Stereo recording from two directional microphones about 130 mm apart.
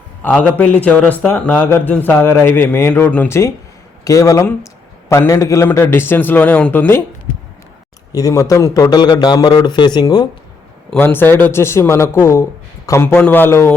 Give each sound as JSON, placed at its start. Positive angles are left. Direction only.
{"t": 0.2, "sound": "a man's voice", "side_deg": 15}
{"t": 8.1, "sound": "a man's voice", "side_deg": 25}
{"t": 10.9, "sound": "a man's voice", "side_deg": 15}